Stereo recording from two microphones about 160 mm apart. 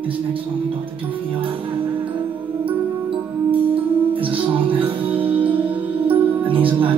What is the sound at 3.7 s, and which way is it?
Music, 35° right (ahead or behind).